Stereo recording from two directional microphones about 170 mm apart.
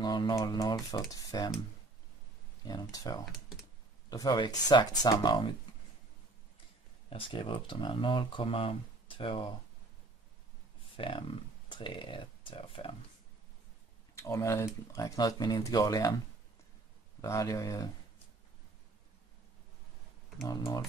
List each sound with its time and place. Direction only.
0.0 s speech: 25° left (ahead or behind)
2.6 s speech: 20° left (ahead or behind)
7.1 s speech: 30° left (ahead or behind)
11.0 s speech: 30° left (ahead or behind)
14.1 s speech: 15° left (ahead or behind)
17.2 s speech: 20° left (ahead or behind)
20.4 s speech: 20° left (ahead or behind)